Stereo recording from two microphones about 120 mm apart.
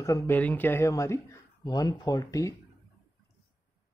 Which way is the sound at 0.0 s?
25° left (ahead or behind).